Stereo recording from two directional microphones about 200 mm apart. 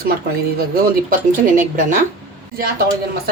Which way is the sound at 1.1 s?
40° right (ahead or behind).